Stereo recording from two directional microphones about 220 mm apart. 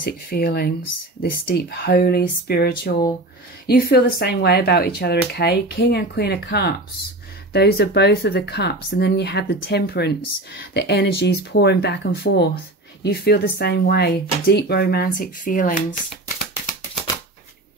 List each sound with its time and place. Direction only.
0.0 s speech: 40° left (ahead or behind)